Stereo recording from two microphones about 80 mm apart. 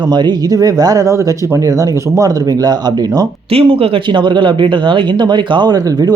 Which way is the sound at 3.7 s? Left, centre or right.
Right.